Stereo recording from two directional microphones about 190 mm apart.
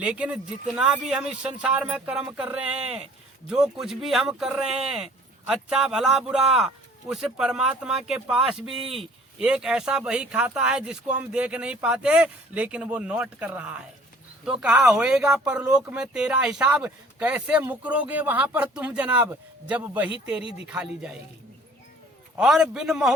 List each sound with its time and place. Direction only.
0.0 s speech: 5° right (ahead or behind)
20.4 s speech: 30° left (ahead or behind)
20.7 s speech: 5° right (ahead or behind)
22.4 s speech: centre (ahead or behind)